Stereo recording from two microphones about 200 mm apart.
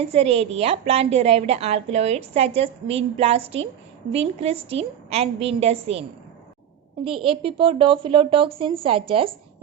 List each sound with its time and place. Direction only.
0.0 s a woman's voice: 30° right (ahead or behind)